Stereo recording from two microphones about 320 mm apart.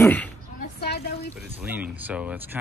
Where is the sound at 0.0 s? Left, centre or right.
Centre.